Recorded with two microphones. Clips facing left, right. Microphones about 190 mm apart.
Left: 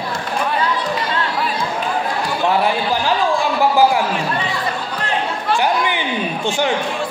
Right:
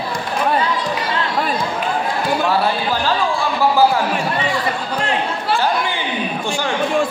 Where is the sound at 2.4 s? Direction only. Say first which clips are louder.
Left 5 dB; 15° left (ahead or behind).